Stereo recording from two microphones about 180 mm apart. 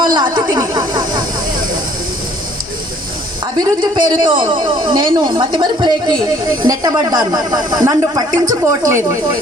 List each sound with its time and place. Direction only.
0.0 s snake: 25° right (ahead or behind)
3.4 s a woman's voice: 25° right (ahead or behind)